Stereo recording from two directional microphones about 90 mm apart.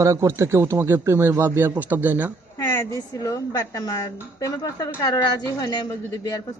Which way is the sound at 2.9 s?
40° left (ahead or behind).